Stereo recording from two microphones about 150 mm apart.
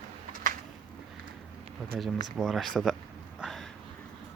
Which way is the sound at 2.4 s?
Centre (ahead or behind).